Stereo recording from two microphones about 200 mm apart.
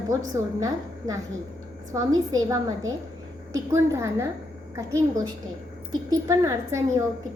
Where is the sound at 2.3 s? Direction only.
15° right (ahead or behind).